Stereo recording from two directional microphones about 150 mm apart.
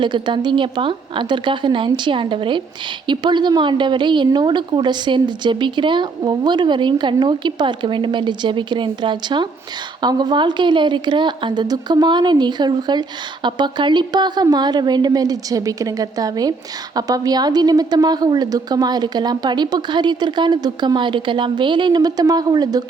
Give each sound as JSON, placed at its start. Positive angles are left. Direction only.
{"t": 0.0, "sound": "a woman's voice", "side_deg": -30}